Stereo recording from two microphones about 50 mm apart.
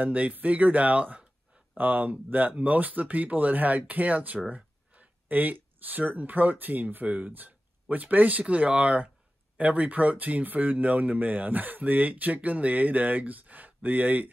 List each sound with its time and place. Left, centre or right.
0.0 s speech: right